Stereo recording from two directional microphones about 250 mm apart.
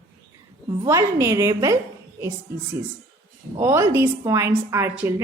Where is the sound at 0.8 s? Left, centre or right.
Centre.